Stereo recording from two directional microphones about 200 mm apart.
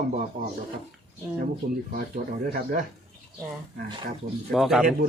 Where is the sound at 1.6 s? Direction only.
60° right (ahead or behind).